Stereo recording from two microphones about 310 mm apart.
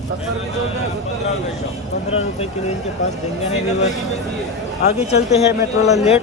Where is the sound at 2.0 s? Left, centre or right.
Centre.